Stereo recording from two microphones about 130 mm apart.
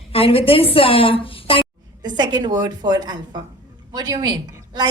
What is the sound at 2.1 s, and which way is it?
A woman's voice, 35° right (ahead or behind).